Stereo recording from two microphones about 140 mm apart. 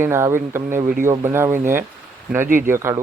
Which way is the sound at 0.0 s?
20° right (ahead or behind).